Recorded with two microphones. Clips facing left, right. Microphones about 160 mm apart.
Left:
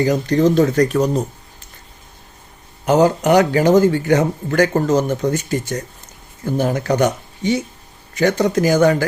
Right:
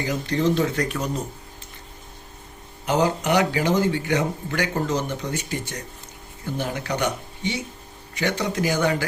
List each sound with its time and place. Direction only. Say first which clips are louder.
0.0 s a man's voice: left 8 dB; 45° left (ahead or behind)
2.8 s a man's voice: left 8 dB; 45° left (ahead or behind)